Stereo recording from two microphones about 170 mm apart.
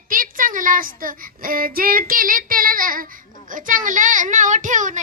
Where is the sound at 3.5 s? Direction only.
50° right (ahead or behind).